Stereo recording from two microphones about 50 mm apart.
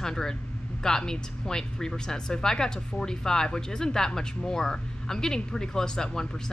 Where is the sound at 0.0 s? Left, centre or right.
Centre.